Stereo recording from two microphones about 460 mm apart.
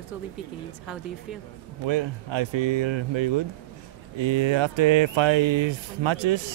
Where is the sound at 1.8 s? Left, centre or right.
Right.